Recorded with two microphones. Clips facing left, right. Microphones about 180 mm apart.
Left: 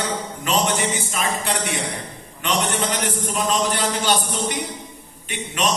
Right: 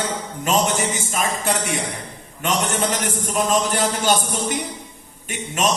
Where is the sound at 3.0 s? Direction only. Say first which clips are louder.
Right 1 dB; 50° right (ahead or behind).